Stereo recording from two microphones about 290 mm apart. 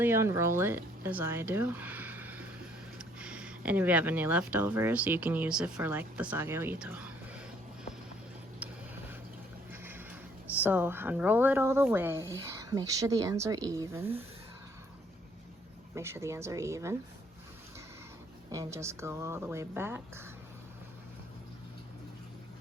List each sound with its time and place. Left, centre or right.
0.0 s speech: centre
8.5 s a sound: centre
9.8 s music: centre
10.6 s speech: centre
16.0 s speech: centre
18.5 s speech: centre